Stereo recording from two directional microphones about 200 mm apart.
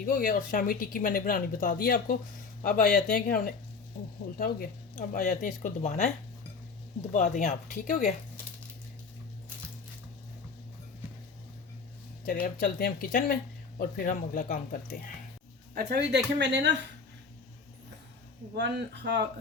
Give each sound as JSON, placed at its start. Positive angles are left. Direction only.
{"t": 0.0, "sound": "speech", "side_deg": 40}
{"t": 7.1, "sound": "speech", "side_deg": 40}
{"t": 12.2, "sound": "speech", "side_deg": 45}
{"t": 15.7, "sound": "speech", "side_deg": -55}
{"t": 18.5, "sound": "speech", "side_deg": -60}